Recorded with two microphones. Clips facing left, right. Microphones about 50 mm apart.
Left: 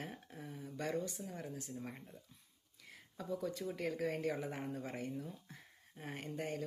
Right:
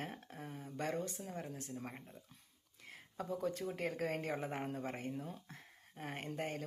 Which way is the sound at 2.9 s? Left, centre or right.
Right.